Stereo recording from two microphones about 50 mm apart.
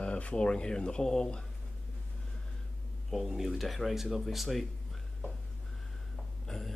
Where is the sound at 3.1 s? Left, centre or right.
Centre.